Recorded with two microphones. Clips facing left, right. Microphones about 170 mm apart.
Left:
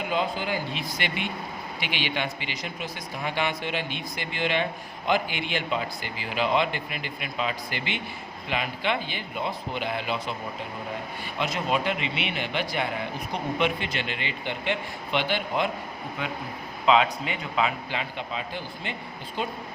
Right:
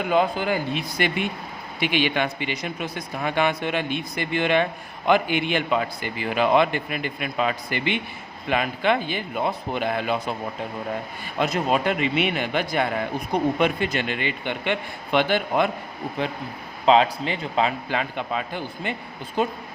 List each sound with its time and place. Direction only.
0.1 s a man's voice: 50° right (ahead or behind)
11.3 s a man's voice: 40° right (ahead or behind)
16.8 s a man's voice: 35° right (ahead or behind)